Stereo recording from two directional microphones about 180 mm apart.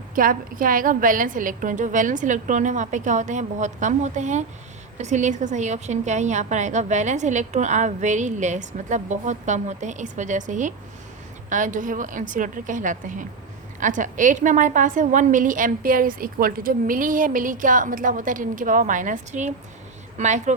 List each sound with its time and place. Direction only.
0.2 s a woman's voice: 50° right (ahead or behind)